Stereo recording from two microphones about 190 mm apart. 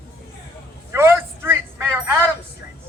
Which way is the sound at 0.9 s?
15° right (ahead or behind).